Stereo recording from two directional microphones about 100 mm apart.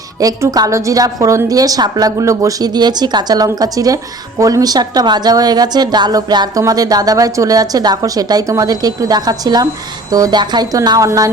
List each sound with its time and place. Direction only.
0.2 s a woman's voice: 35° right (ahead or behind)